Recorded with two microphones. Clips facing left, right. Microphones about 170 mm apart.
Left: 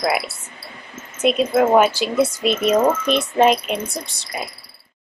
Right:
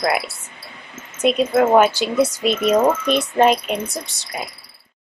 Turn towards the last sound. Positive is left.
turn(degrees=0)  # may be behind; listen again after turning